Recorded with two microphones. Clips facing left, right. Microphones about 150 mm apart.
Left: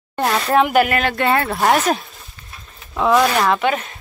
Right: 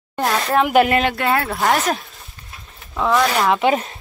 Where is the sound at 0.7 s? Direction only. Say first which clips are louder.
Right 1 dB; 20° right (ahead or behind).